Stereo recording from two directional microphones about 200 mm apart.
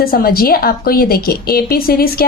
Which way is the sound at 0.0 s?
45° left (ahead or behind).